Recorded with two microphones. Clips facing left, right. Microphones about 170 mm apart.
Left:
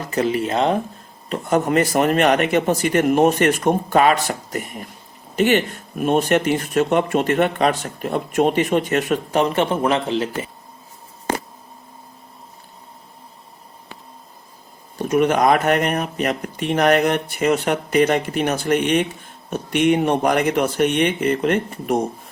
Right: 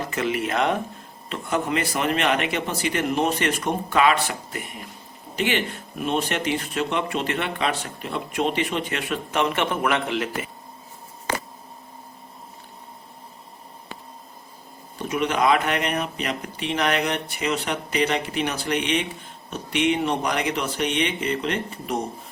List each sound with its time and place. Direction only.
0.1 s speech: 35° left (ahead or behind)
1.3 s speech: 40° left (ahead or behind)
14.9 s speech: 45° left (ahead or behind)